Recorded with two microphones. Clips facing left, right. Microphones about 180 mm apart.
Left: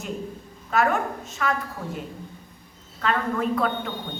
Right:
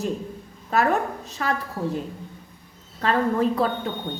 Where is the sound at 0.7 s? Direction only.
35° right (ahead or behind).